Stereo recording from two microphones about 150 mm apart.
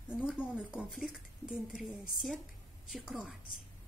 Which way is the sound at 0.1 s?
5° right (ahead or behind).